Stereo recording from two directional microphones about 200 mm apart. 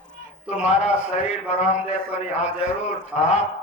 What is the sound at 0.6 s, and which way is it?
A man's voice, 35° left (ahead or behind).